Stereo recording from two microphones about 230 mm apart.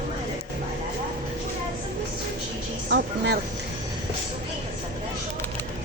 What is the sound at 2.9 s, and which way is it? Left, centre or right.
Speech, right.